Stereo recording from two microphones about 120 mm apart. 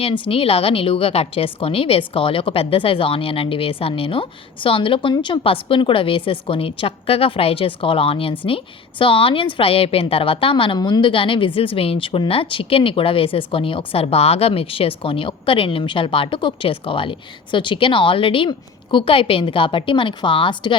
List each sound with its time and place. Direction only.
0.0 s a woman's voice: 50° left (ahead or behind)